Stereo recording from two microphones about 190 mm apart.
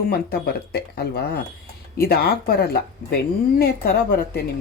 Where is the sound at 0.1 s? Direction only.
55° left (ahead or behind).